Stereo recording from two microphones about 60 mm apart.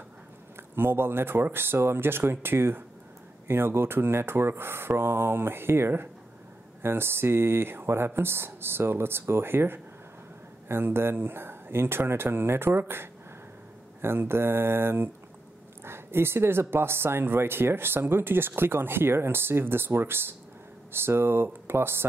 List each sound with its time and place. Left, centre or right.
0.6 s speech: right